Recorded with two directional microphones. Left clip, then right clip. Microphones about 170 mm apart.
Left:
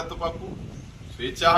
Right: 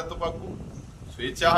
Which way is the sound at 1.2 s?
30° right (ahead or behind).